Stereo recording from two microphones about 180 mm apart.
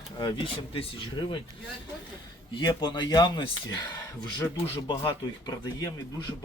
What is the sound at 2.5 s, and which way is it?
Speech, 25° left (ahead or behind).